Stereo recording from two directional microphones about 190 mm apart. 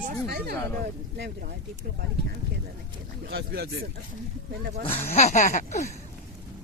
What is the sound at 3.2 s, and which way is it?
Speech, 60° right (ahead or behind).